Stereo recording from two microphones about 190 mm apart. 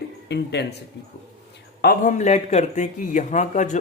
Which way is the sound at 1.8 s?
45° left (ahead or behind).